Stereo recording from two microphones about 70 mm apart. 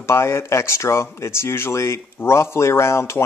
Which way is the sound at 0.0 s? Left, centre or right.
Left.